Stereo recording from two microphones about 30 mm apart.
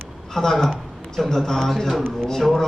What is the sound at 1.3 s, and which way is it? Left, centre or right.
A man's voice, centre.